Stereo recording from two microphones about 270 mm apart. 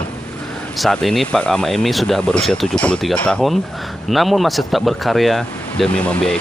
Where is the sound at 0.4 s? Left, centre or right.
Centre.